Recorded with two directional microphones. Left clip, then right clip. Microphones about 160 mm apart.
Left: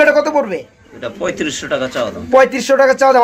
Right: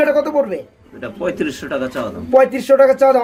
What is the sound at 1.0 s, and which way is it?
Speech, 45° right (ahead or behind).